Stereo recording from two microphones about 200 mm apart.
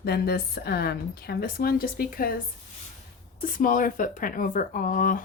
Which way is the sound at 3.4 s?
40° left (ahead or behind).